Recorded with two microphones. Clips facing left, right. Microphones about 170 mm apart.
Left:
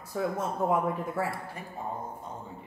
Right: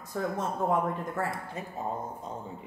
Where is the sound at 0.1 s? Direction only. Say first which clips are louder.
Left 1 dB; 5° left (ahead or behind).